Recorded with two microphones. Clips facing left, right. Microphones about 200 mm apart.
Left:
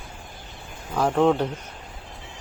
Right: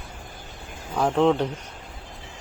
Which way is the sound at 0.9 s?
Centre (ahead or behind).